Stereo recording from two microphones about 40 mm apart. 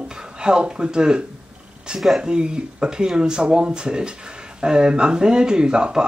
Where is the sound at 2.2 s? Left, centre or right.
Right.